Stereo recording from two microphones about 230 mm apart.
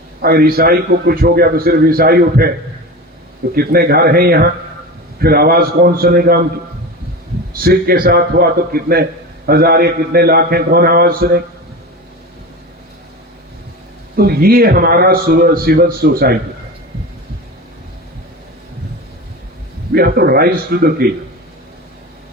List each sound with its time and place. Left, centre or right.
0.2 s a man's voice: right
3.5 s a man's voice: right
7.6 s a man's voice: right
14.2 s a man's voice: right
19.9 s a man's voice: right